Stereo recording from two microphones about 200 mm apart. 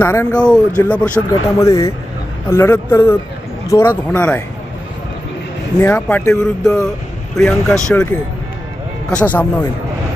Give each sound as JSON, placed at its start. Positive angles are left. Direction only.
{"t": 0.0, "sound": "speech", "side_deg": 10}
{"t": 5.8, "sound": "speech", "side_deg": 10}
{"t": 9.0, "sound": "speech", "side_deg": 5}